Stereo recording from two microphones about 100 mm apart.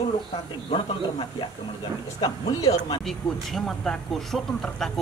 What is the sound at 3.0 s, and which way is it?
Speech, 5° left (ahead or behind).